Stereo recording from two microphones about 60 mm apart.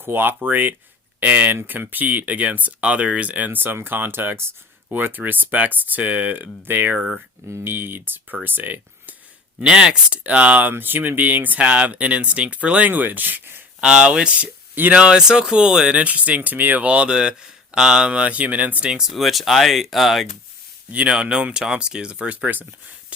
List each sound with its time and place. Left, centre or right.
0.0 s speech: right
9.6 s speech: centre; by 13.6 s right
13.8 s speech: centre
18.9 s speech: centre
19.1 s speech: centre
20.9 s speech: centre